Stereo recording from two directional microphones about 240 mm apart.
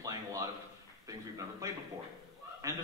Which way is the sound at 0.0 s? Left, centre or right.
Centre.